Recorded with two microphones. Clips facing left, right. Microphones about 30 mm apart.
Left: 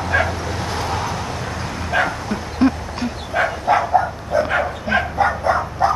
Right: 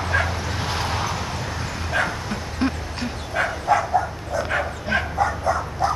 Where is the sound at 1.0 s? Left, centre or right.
Centre.